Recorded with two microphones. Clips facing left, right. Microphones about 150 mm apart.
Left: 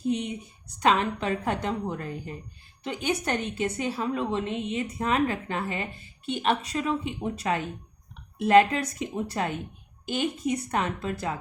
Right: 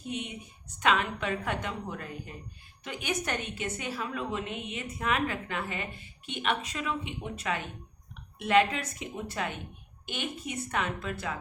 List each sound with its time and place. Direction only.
0.8 s a woman's voice: 35° left (ahead or behind)